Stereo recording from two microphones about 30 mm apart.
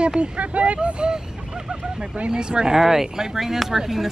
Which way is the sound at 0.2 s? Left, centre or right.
Right.